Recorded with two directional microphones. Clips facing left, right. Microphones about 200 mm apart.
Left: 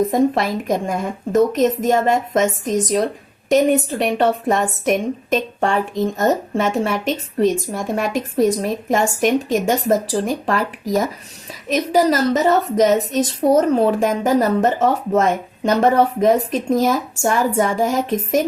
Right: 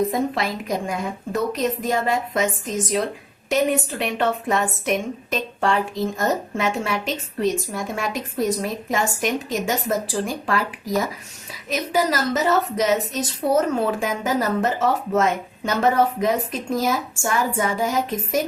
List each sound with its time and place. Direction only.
0.1 s a woman's voice: 45° left (ahead or behind)
3.8 s a woman's voice: 40° left (ahead or behind)